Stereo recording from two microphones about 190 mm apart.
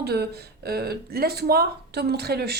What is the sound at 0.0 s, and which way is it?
A woman's voice, 55° right (ahead or behind).